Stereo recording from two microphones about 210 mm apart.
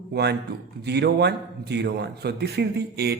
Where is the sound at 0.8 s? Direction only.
50° right (ahead or behind).